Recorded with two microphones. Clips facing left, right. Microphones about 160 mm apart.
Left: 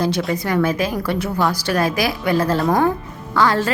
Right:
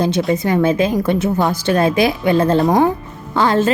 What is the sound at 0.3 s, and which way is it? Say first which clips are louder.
A woman's voice: right 4 dB; 25° right (ahead or behind).